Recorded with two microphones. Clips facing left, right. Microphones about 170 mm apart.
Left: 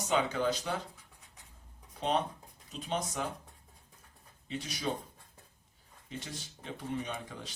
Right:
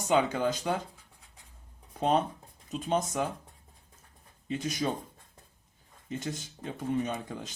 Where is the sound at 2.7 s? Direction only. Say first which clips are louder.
Right 6 dB; 45° right (ahead or behind).